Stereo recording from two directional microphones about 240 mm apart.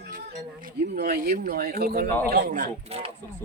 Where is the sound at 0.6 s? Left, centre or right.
Right.